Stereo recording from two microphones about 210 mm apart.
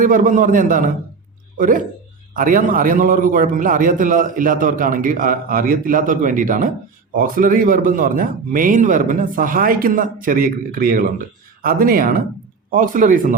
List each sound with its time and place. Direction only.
0.0 s a man's voice: 40° right (ahead or behind)